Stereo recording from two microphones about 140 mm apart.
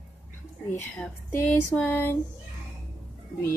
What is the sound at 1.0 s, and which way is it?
Speech, 10° left (ahead or behind).